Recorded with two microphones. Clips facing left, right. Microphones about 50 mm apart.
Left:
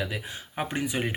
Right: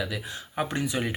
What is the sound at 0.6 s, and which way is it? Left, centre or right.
Speech, left.